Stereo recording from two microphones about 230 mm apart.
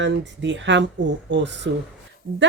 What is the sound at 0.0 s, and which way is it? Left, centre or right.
Speech, right.